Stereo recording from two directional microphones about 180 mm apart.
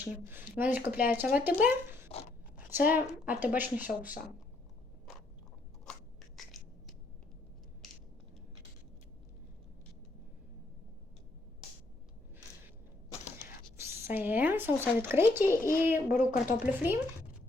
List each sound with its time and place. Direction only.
0.0 s speech: 10° right (ahead or behind)
2.1 s speech: 35° left (ahead or behind)
2.6 s speech: 10° right (ahead or behind)
5.8 s a sound: centre (ahead or behind)
13.7 s speech: 15° right (ahead or behind)